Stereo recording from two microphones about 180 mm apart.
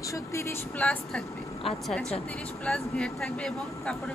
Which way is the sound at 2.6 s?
5° left (ahead or behind).